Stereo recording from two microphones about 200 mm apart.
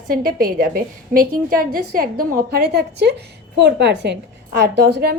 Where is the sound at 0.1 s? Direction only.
45° right (ahead or behind).